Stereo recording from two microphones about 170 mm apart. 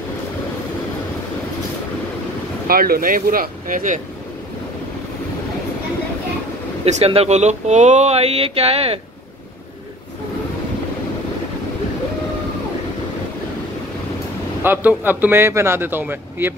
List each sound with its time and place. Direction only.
2.7 s speech: 60° right (ahead or behind)
6.8 s speech: 35° right (ahead or behind)
14.6 s a man's voice: 10° right (ahead or behind)